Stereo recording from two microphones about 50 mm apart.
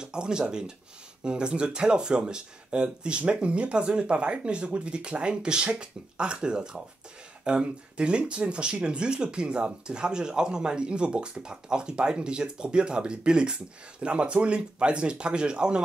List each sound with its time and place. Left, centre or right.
0.0 s speech: centre